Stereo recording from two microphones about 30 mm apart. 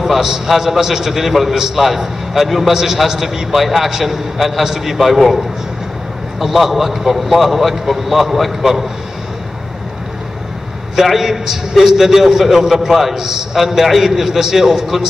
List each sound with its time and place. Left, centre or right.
0.0 s a man's voice: centre
3.5 s a man's voice: centre
6.4 s a man's voice: centre
11.0 s a man's voice: centre